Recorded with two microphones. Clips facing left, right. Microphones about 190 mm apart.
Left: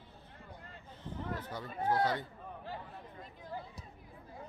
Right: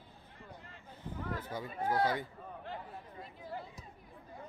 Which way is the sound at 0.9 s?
10° right (ahead or behind).